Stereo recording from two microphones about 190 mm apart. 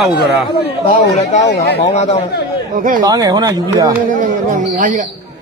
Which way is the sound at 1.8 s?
35° left (ahead or behind).